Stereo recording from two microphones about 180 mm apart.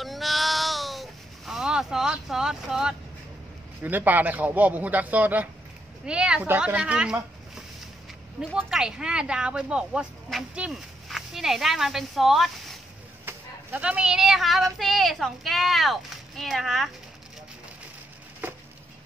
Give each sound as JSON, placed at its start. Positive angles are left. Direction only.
{"t": 0.0, "sound": "meow", "side_deg": 0}
{"t": 3.8, "sound": "a man's voice", "side_deg": -10}
{"t": 8.4, "sound": "speech", "side_deg": -5}
{"t": 13.2, "sound": "speech", "side_deg": -10}